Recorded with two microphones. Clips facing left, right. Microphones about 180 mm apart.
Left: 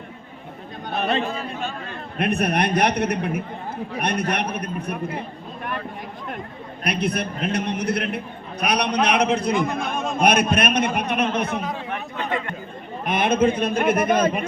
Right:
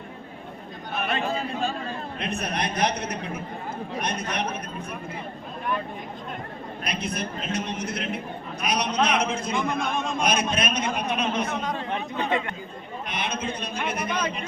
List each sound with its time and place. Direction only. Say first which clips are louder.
0.9 s a man's voice: left 5 dB; 35° left (ahead or behind)
1.9 s a man's voice: left 6 dB; 60° left (ahead or behind)
6.8 s a man's voice: left 7 dB; 65° left (ahead or behind)
11.4 s speech: left 2 dB; 5° left (ahead or behind)
11.9 s chatter: right 1 dB; 20° right (ahead or behind)
13.1 s a man's voice: left 12 dB; 50° left (ahead or behind)